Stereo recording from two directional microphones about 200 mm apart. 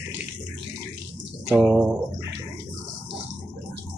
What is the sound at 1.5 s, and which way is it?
Speech, 5° right (ahead or behind).